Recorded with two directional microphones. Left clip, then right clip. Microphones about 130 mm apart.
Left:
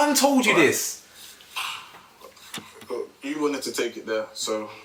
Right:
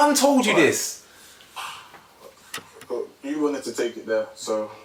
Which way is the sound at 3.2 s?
40° left (ahead or behind).